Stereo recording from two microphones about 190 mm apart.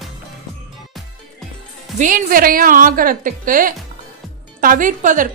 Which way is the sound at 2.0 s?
45° right (ahead or behind).